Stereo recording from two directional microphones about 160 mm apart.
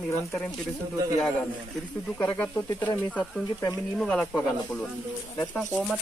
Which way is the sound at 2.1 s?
10° left (ahead or behind).